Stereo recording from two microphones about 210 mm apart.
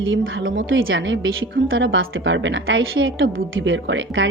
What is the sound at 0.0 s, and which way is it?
A woman's voice, 65° right (ahead or behind).